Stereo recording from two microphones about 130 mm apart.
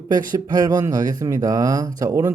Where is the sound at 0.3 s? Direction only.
30° right (ahead or behind).